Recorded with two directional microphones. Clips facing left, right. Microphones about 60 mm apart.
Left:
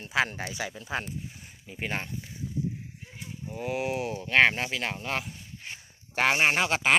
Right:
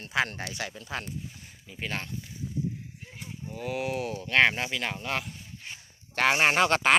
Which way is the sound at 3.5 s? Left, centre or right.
Centre.